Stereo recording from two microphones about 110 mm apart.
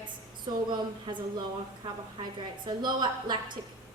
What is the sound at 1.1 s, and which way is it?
Speech, 45° right (ahead or behind).